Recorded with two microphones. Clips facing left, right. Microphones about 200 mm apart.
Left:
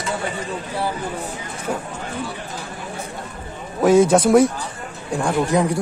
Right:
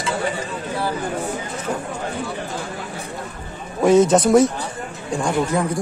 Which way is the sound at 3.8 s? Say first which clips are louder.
Even; 5° left (ahead or behind).